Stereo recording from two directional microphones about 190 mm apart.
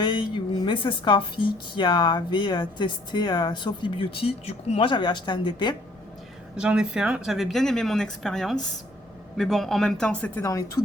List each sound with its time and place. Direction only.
0.0 s a woman's voice: 25° left (ahead or behind)
6.6 s speech: 5° right (ahead or behind); by 10.8 s 20° left (ahead or behind)